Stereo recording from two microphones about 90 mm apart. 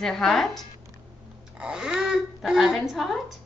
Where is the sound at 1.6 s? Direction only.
10° right (ahead or behind).